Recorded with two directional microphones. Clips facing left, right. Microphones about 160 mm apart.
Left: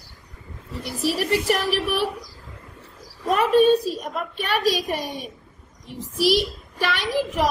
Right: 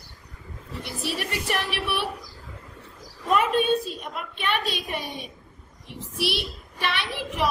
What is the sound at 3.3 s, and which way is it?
Speech, 40° left (ahead or behind).